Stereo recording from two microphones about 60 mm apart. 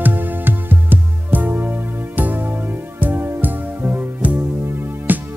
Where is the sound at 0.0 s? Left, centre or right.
Right.